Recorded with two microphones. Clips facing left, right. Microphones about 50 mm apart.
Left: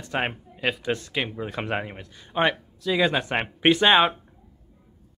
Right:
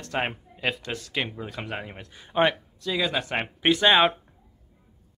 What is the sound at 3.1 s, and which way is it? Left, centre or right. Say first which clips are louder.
Speech: left 2 dB; centre.